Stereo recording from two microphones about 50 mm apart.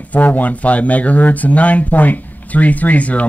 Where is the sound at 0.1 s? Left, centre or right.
Left.